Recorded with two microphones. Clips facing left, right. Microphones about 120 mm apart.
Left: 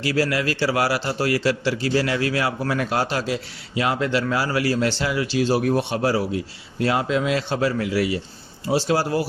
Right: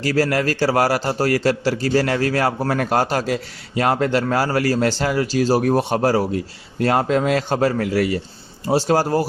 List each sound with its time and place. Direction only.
0.0 s a man's voice: 45° right (ahead or behind)